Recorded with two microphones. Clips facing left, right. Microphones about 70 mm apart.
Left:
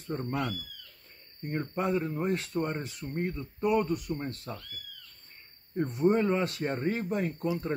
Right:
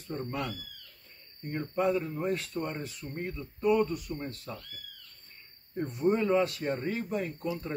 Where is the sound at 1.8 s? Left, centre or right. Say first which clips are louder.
Right 1 dB; left.